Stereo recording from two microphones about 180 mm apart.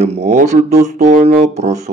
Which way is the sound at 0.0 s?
40° right (ahead or behind).